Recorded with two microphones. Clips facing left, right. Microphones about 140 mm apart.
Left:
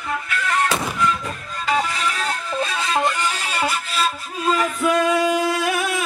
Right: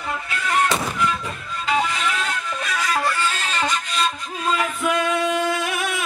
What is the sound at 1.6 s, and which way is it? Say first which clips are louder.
Music: even; 40° left (ahead or behind).